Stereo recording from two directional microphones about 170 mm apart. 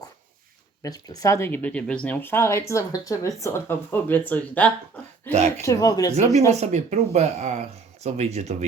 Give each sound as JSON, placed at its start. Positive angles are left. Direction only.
{"t": 0.8, "sound": "speech", "side_deg": 20}
{"t": 5.3, "sound": "speech", "side_deg": -40}
{"t": 5.6, "sound": "speech", "side_deg": 20}
{"t": 6.5, "sound": "speech", "side_deg": -40}